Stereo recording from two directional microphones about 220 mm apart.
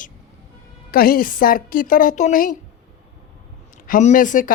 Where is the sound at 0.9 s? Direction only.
40° left (ahead or behind).